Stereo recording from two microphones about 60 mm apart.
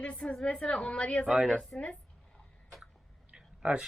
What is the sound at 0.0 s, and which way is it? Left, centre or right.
A woman's voice, left.